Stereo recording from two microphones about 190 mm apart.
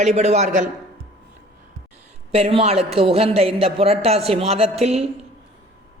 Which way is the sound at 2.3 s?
30° right (ahead or behind).